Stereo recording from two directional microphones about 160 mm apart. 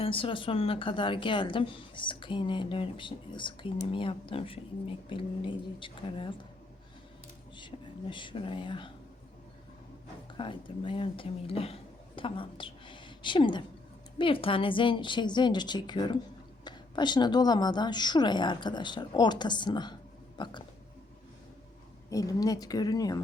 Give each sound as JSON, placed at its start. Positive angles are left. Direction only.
{"t": 0.0, "sound": "speech", "side_deg": 35}
{"t": 7.5, "sound": "speech", "side_deg": 30}
{"t": 10.3, "sound": "a woman's voice", "side_deg": 30}
{"t": 22.1, "sound": "a woman's voice", "side_deg": 20}